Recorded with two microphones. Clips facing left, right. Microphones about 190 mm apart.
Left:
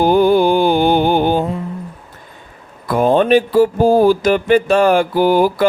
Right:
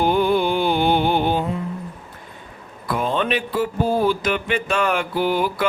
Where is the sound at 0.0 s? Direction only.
40° left (ahead or behind).